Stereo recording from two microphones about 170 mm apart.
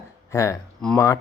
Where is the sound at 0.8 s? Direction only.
5° left (ahead or behind).